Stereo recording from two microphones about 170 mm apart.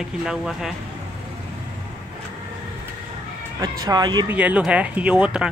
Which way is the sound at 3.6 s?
20° right (ahead or behind).